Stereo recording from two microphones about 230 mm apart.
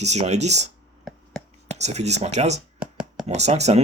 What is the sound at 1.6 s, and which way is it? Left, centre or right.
Speech, right.